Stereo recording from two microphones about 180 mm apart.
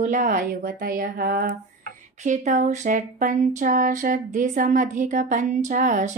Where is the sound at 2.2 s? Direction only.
45° right (ahead or behind).